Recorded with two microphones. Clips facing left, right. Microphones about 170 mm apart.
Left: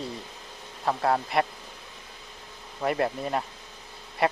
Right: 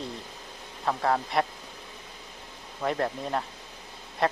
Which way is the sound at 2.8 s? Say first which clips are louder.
Left 2 dB; 5° left (ahead or behind).